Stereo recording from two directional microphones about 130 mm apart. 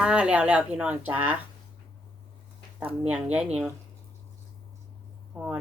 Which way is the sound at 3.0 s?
10° right (ahead or behind).